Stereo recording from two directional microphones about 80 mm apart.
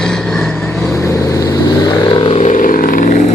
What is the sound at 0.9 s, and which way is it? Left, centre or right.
Vehicle, left.